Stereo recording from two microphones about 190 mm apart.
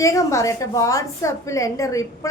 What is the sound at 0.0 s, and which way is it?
A woman's voice, 15° left (ahead or behind).